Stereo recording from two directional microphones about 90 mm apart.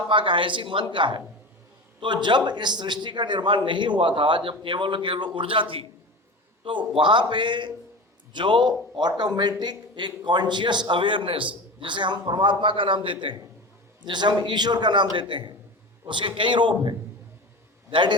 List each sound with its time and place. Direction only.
0.1 s a man's voice: 70° right (ahead or behind)
6.7 s a man's voice: 65° right (ahead or behind)
14.0 s a man's voice: 55° right (ahead or behind)